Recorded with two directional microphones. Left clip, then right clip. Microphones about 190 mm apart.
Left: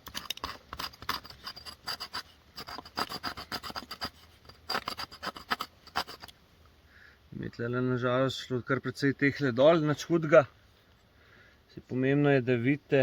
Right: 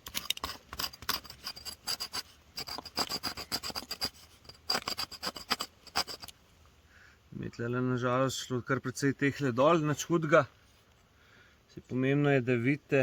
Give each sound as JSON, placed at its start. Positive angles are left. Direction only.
{"t": 0.0, "sound": "a sound", "side_deg": -30}
{"t": 7.4, "sound": "speech", "side_deg": -30}
{"t": 11.9, "sound": "speech", "side_deg": -35}